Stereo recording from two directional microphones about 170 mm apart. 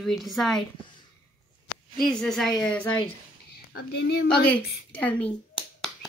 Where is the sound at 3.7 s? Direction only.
70° left (ahead or behind).